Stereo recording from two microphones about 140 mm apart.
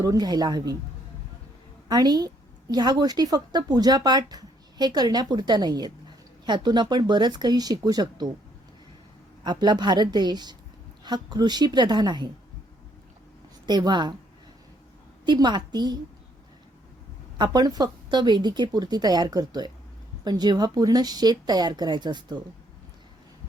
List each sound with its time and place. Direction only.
0.0 s a woman's voice: 30° right (ahead or behind)
1.9 s a woman's voice: 30° right (ahead or behind)
9.4 s speech: 30° right (ahead or behind)
13.7 s speech: 30° right (ahead or behind)
15.3 s speech: 30° right (ahead or behind)
17.3 s a woman's voice: 30° right (ahead or behind)